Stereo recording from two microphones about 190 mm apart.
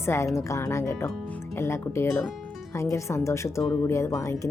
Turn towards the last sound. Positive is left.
turn(degrees=15)  # may be behind; listen again after turning